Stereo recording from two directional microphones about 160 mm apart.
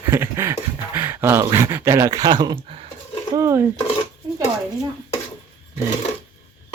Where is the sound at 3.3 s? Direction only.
15° right (ahead or behind).